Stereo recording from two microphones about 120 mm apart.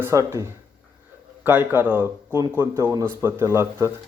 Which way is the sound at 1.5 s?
15° right (ahead or behind).